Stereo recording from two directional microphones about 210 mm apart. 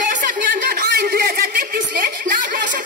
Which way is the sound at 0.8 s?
45° right (ahead or behind).